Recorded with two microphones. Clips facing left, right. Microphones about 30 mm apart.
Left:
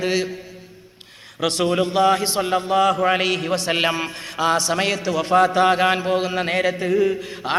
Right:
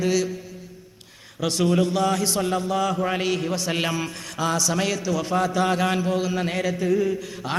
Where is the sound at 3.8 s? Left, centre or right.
Left.